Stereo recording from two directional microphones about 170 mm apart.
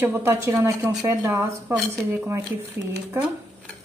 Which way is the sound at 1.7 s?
Centre (ahead or behind).